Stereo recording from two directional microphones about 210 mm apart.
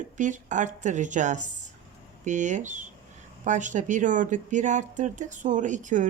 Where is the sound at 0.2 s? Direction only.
35° right (ahead or behind).